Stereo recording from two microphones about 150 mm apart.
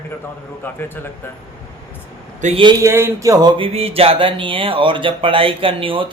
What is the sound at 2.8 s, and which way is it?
Speech, 15° right (ahead or behind).